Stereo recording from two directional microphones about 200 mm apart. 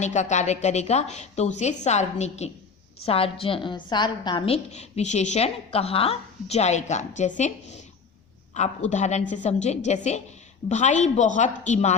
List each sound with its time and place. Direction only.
0.0 s a woman's voice: 35° left (ahead or behind)